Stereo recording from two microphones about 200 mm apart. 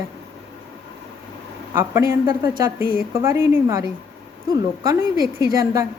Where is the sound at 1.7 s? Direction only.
10° right (ahead or behind).